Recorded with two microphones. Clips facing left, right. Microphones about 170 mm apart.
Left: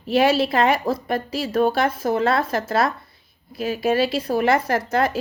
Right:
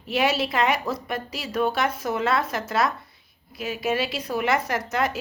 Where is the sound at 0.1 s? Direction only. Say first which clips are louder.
Left 6 dB; 30° left (ahead or behind).